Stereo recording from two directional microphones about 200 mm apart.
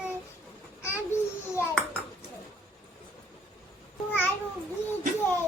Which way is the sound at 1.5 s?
10° left (ahead or behind).